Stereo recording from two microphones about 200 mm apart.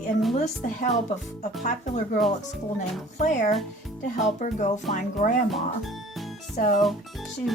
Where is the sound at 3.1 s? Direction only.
40° left (ahead or behind).